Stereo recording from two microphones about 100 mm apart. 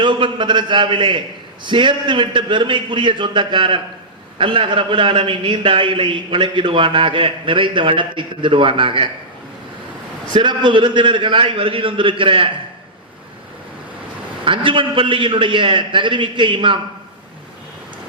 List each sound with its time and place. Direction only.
0.0 s a man's voice: 55° right (ahead or behind)
10.3 s a man's voice: 50° right (ahead or behind)
14.4 s a man's voice: 60° right (ahead or behind)